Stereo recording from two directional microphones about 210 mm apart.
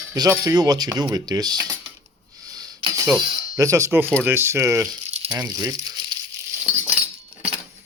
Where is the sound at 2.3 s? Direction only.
15° right (ahead or behind).